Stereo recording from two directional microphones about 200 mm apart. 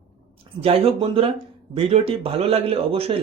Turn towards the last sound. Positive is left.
turn(degrees=-30)  # may be behind; listen again after turning